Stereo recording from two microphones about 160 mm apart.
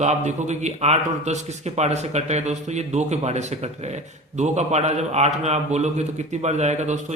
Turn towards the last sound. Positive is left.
turn(degrees=-45)  # may be behind; listen again after turning